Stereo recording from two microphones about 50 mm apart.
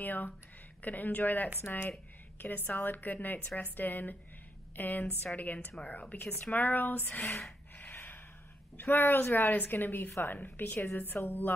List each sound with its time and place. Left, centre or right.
0.0 s a sound: left
0.8 s speech: left
7.7 s gasp: left
8.9 s speech: left